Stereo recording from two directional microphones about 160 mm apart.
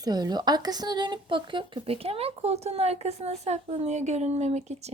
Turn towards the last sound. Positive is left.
turn(degrees=-45)  # may be behind; listen again after turning